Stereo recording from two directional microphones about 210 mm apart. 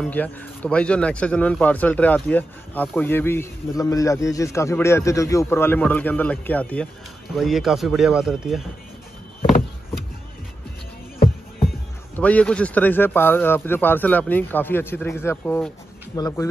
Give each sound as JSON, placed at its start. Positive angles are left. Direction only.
{"t": 0.0, "sound": "a man's voice", "side_deg": 5}
{"t": 12.2, "sound": "a man's voice", "side_deg": 5}